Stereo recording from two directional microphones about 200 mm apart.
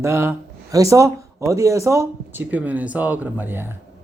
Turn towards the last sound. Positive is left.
turn(degrees=-10)  # may be behind; listen again after turning